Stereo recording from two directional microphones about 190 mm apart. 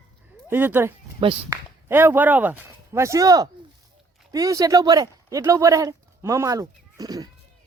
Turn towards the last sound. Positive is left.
turn(degrees=-20)  # may be behind; listen again after turning